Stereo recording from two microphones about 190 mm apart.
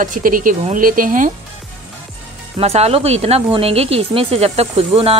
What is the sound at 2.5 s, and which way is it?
Speech, 35° right (ahead or behind).